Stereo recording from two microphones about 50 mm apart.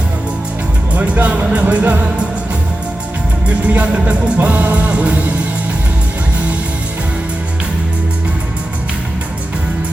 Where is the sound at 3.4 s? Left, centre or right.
Right.